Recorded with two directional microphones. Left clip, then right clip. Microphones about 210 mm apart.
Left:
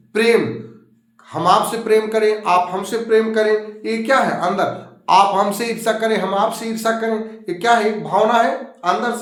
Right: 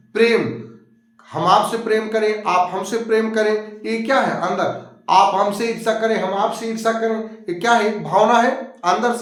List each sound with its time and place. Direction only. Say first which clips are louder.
0.1 s a man's voice: left 1 dB; 15° left (ahead or behind)